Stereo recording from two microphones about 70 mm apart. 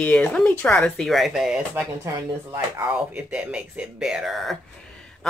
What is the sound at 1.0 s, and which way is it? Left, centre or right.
Speech, centre.